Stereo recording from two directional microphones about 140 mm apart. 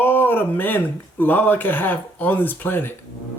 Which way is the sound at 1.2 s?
15° left (ahead or behind).